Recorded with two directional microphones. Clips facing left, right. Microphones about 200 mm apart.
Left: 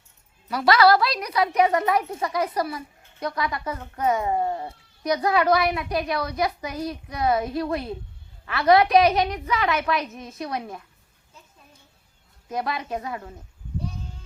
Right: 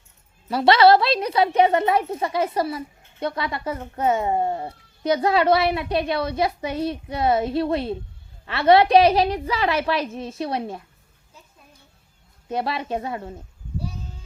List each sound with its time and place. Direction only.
0.4 s a woman's voice: 25° right (ahead or behind)
12.5 s a woman's voice: 30° right (ahead or behind)